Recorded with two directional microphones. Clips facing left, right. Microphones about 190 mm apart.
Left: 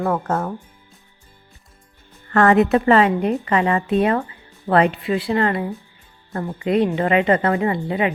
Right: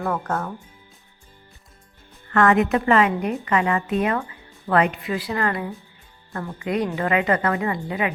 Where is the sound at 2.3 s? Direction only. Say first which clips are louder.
Left 3 dB; 35° left (ahead or behind).